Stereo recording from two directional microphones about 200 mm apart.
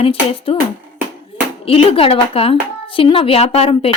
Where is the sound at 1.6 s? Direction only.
30° left (ahead or behind).